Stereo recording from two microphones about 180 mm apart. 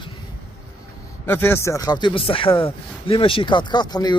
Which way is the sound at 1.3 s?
10° left (ahead or behind).